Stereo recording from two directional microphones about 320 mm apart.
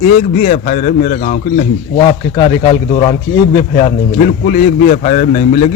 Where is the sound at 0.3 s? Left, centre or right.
Left.